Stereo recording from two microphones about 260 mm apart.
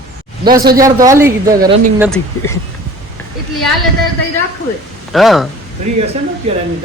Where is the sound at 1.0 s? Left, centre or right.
Centre.